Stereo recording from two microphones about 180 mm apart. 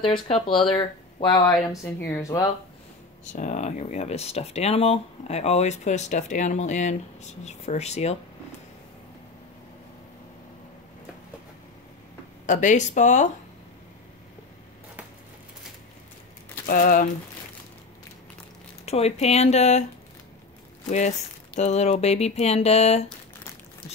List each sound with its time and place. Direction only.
0.0 s speech: 30° left (ahead or behind)
1.7 s speech: 15° left (ahead or behind)
3.3 s speech: 40° left (ahead or behind)
12.4 s speech: 45° left (ahead or behind)
16.6 s speech: 50° left (ahead or behind)
18.9 s speech: 35° left (ahead or behind)
21.5 s speech: 40° left (ahead or behind)